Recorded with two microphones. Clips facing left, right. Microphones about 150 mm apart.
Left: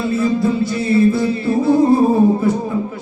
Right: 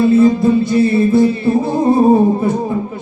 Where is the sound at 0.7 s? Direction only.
25° right (ahead or behind).